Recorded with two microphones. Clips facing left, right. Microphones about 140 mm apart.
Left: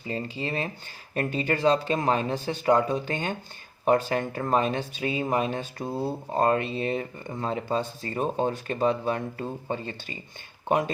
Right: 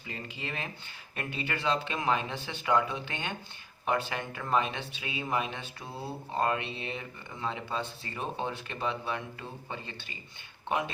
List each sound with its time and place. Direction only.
0.1 s speech: 35° left (ahead or behind)